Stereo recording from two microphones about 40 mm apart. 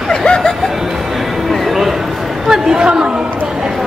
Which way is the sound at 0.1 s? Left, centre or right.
Centre.